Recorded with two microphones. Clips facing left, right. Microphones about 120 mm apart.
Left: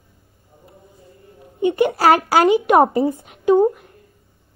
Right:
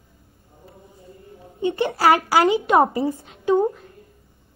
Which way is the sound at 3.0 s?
20° left (ahead or behind).